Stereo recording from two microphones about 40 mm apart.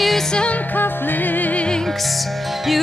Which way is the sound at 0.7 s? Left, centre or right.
Left.